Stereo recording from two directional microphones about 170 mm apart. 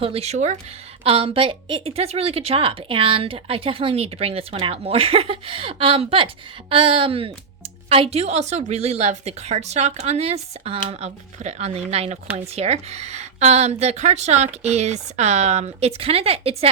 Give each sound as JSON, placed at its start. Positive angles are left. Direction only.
{"t": 0.0, "sound": "a woman's voice", "side_deg": -35}